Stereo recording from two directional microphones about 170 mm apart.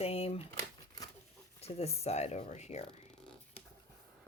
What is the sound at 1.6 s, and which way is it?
Speech, 35° left (ahead or behind).